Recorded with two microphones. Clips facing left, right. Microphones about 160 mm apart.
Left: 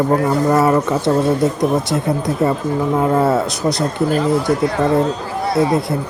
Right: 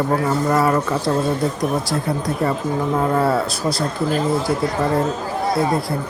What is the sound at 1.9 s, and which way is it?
Speech, 20° left (ahead or behind).